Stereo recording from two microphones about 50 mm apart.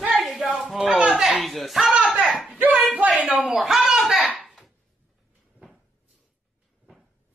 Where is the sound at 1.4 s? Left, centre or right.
Centre.